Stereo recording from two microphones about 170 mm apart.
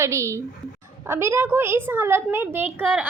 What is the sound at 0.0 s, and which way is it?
A woman's voice, 15° right (ahead or behind).